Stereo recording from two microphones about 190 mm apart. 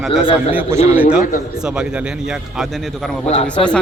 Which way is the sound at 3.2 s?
35° left (ahead or behind).